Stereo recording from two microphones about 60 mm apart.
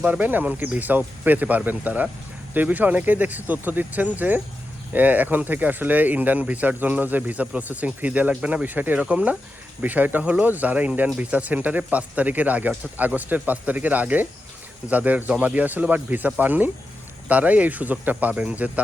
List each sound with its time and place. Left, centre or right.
0.0 s speech: right